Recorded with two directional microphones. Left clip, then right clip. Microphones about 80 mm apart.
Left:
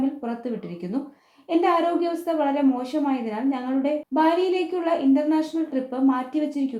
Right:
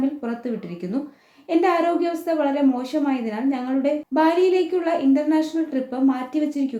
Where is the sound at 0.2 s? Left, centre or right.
Left.